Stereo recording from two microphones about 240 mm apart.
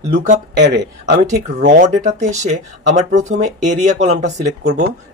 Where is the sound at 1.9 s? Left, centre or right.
Right.